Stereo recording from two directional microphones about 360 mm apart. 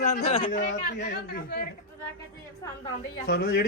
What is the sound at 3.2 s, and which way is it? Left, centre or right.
Speech, left.